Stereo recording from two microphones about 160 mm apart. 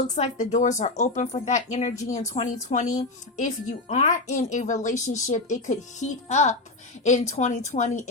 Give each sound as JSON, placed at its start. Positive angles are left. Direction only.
{"t": 0.2, "sound": "speech", "side_deg": 50}